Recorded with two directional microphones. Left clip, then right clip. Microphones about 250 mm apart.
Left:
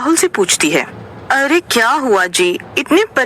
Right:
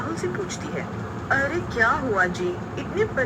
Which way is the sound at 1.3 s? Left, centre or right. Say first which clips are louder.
Left 11 dB; left.